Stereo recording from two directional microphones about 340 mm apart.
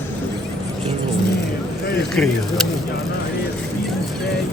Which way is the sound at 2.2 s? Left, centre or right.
Centre.